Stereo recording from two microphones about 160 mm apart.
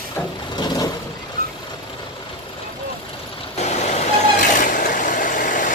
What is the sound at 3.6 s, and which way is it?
Vehicle, 45° left (ahead or behind).